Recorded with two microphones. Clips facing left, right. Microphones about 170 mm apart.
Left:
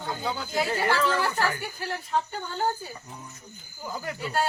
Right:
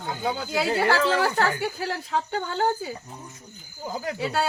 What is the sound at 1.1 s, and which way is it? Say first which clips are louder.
Speech: right 4 dB; 75° right (ahead or behind).